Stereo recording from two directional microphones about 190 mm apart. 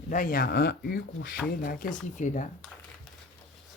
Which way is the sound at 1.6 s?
45° left (ahead or behind).